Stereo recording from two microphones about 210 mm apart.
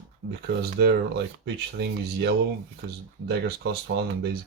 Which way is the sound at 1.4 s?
50° right (ahead or behind).